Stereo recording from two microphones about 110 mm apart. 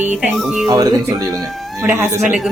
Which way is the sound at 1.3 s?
Centre (ahead or behind).